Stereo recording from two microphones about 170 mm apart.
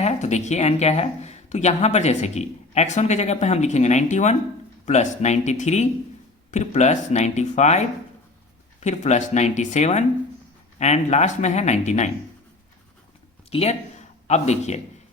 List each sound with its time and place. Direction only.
0.0 s speech: 45° left (ahead or behind)
13.5 s speech: 40° left (ahead or behind)